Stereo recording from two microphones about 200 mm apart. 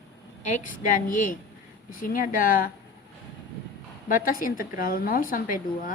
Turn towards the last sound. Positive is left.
turn(degrees=45)  # may be behind; listen again after turning